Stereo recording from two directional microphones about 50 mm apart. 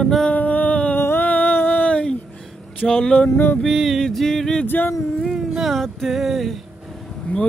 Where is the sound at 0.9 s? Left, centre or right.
Left.